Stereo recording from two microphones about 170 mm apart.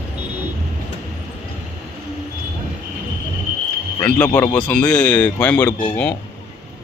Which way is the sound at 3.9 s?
10° left (ahead or behind).